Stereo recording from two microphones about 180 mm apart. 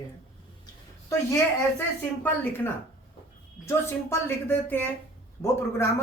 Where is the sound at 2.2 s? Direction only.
10° left (ahead or behind).